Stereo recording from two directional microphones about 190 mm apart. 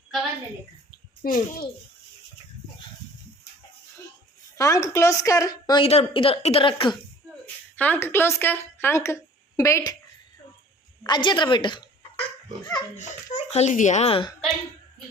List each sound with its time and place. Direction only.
1.2 s a child's voice: 50° left (ahead or behind)
4.5 s a woman's voice: 15° left (ahead or behind)
7.4 s speech: 10° left (ahead or behind)
11.0 s a woman's voice: 25° left (ahead or behind)
13.0 s a child's voice: 40° left (ahead or behind)